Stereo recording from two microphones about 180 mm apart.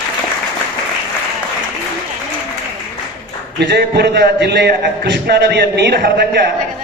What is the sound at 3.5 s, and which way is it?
A man's voice, 70° right (ahead or behind).